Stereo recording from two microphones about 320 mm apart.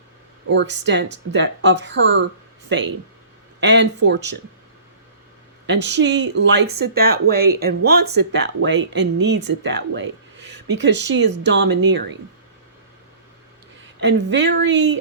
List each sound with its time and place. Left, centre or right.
0.4 s speech: right
5.6 s speech: right
14.0 s speech: right